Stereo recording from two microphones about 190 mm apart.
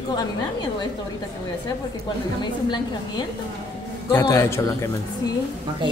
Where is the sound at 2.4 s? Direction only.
25° left (ahead or behind).